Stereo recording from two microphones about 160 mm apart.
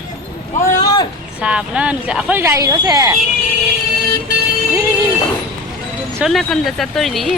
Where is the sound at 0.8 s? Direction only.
25° left (ahead or behind).